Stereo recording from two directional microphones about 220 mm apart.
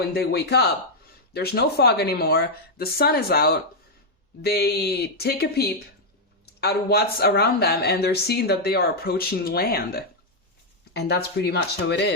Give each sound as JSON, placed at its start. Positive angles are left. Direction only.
{"t": 0.1, "sound": "speech", "side_deg": 45}